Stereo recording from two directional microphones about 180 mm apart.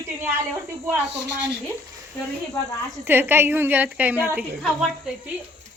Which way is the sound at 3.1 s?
10° right (ahead or behind).